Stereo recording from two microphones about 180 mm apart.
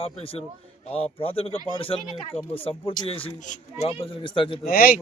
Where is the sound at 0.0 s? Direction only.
30° left (ahead or behind).